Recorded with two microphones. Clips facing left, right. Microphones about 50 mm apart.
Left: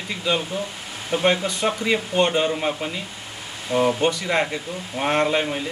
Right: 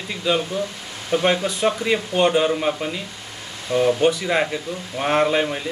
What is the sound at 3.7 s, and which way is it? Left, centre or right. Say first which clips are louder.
Speech: right 1 dB; left.